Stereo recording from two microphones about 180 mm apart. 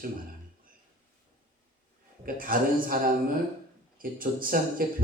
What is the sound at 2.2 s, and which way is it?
A man's voice, 50° right (ahead or behind).